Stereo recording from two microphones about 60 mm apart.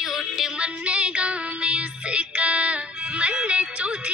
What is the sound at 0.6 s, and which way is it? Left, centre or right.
Music, right.